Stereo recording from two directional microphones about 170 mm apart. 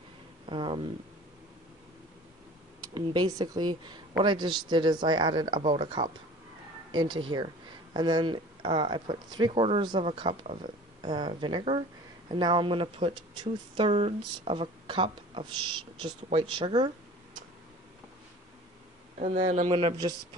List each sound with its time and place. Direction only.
0.5 s speech: 30° right (ahead or behind)
2.9 s speech: 25° right (ahead or behind)
19.1 s speech: 45° right (ahead or behind)
19.7 s speech: 30° right (ahead or behind)